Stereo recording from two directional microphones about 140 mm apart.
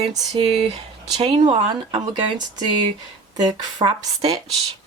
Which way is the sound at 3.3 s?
30° right (ahead or behind).